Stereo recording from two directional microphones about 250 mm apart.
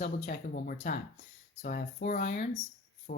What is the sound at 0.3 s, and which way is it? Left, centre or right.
Speech, left.